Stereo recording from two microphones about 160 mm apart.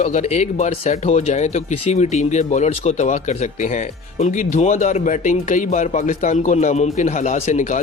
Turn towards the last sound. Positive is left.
turn(degrees=50)  # may be behind; listen again after turning